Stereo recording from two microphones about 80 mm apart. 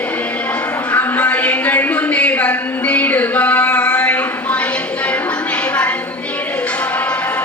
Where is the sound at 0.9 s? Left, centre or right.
Left.